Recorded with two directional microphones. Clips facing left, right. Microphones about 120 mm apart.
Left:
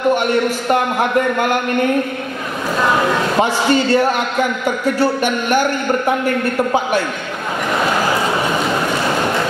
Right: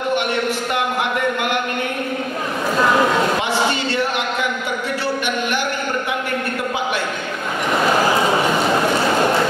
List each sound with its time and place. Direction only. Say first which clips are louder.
0.1 s a man's voice: left 4 dB; 40° left (ahead or behind)
3.3 s speech: left 5 dB; 40° left (ahead or behind)